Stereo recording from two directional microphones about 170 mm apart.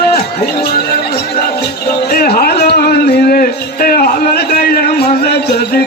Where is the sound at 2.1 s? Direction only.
65° left (ahead or behind).